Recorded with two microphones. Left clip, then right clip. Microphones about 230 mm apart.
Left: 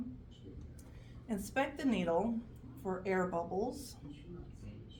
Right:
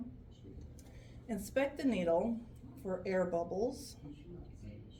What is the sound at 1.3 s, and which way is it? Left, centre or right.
Speech, left.